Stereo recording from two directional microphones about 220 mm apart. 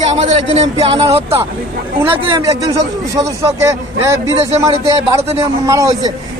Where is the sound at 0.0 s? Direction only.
30° right (ahead or behind).